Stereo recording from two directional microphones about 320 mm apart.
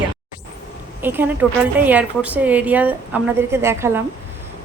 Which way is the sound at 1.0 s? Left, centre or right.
Centre.